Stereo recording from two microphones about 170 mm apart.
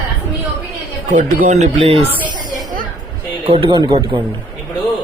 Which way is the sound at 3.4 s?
35° right (ahead or behind).